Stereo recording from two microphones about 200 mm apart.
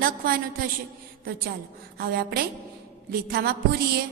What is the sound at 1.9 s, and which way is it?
A woman's voice, 50° right (ahead or behind).